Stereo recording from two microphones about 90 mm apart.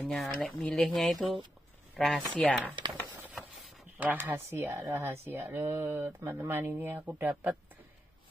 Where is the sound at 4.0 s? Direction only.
20° right (ahead or behind).